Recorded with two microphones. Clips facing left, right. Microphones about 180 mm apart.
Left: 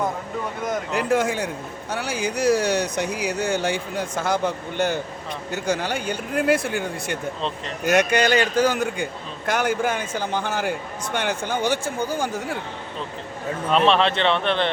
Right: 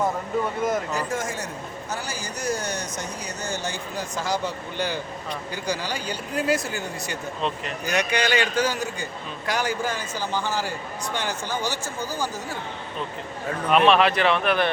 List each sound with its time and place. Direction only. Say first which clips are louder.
0.9 s a man's voice: left 7 dB; 65° left (ahead or behind)
13.7 s speech: right 1 dB; 30° left (ahead or behind)